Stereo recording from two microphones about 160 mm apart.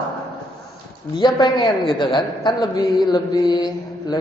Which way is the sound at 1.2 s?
25° left (ahead or behind).